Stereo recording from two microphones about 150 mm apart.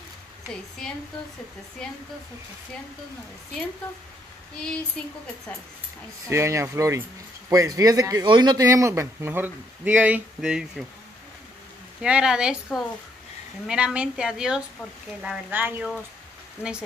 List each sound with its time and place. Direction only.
6.2 s speech: 20° right (ahead or behind)
12.0 s a woman's voice: 5° right (ahead or behind)